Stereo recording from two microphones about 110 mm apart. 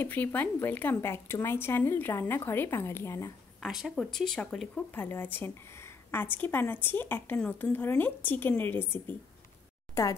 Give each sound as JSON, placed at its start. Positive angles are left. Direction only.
{"t": 0.0, "sound": "speech", "side_deg": 15}
{"t": 3.6, "sound": "speech", "side_deg": -5}